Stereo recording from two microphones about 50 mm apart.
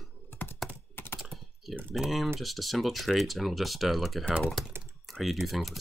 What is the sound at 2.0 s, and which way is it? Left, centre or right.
Speech, centre.